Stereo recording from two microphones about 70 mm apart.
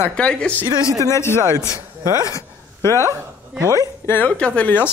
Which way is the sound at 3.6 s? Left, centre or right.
Right.